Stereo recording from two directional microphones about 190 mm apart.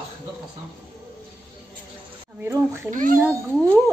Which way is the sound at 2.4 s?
15° right (ahead or behind).